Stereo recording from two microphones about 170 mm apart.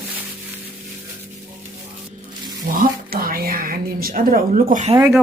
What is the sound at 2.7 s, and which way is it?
Speech, 55° right (ahead or behind).